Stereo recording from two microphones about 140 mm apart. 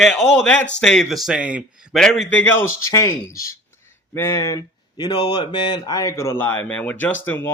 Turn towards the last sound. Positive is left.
turn(degrees=15)  # may be behind; listen again after turning